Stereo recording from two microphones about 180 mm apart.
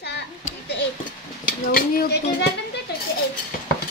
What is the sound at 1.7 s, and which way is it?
Speech, 55° left (ahead or behind).